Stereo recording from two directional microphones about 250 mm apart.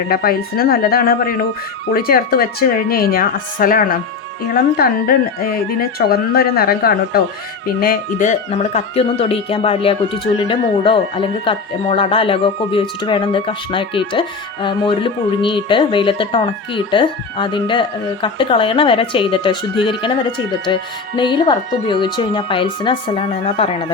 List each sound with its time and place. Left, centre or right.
0.1 s speech: left
6.0 s speech: left